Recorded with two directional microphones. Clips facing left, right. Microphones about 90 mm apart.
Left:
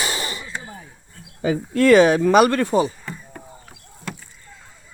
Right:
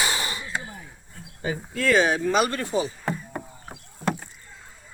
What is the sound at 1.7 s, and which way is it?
Speech, 70° left (ahead or behind).